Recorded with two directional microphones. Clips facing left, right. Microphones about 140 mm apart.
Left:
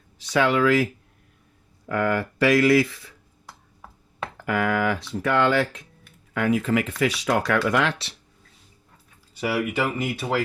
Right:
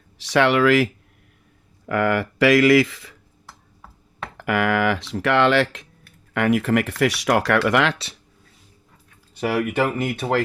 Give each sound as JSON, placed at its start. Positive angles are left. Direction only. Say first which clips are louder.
{"t": 0.3, "sound": "speech", "louder": "right 3 dB", "side_deg": -75}
{"t": 1.9, "sound": "speech", "louder": "right 3 dB", "side_deg": -90}
{"t": 4.4, "sound": "speech", "louder": "right 3 dB", "side_deg": -90}
{"t": 6.3, "sound": "speech", "louder": "right 3 dB", "side_deg": -75}
{"t": 9.6, "sound": "speech", "louder": "right 4 dB", "side_deg": -50}